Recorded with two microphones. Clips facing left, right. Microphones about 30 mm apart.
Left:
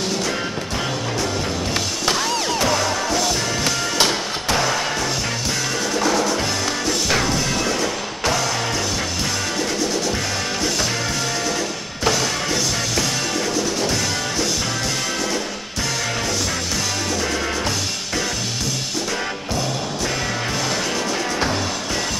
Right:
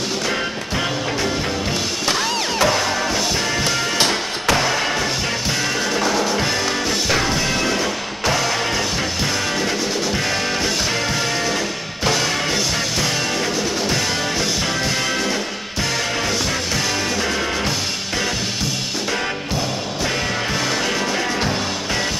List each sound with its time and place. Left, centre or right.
2.0 s music: centre
4.6 s music: centre
5.9 s music: centre